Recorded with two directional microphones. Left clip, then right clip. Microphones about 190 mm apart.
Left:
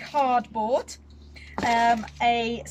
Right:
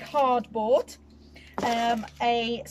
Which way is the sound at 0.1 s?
30° right (ahead or behind).